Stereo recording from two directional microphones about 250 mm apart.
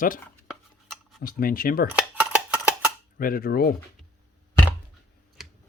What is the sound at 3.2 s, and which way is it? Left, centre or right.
Speech, left.